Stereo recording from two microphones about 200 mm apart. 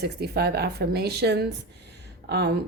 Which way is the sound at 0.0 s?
55° right (ahead or behind).